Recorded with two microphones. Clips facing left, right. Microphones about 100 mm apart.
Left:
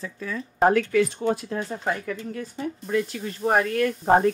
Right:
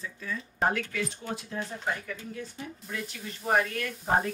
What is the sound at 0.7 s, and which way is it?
Speech, 55° left (ahead or behind).